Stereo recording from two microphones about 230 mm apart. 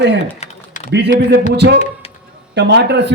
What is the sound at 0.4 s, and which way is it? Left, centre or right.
Typing, left.